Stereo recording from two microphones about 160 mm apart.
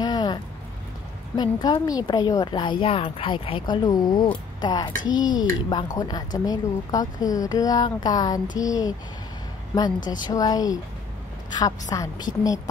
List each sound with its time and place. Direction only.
0.0 s a sound: 25° left (ahead or behind)
1.3 s speech: 25° left (ahead or behind)
10.2 s speech: 25° left (ahead or behind)
11.9 s speech: 25° left (ahead or behind)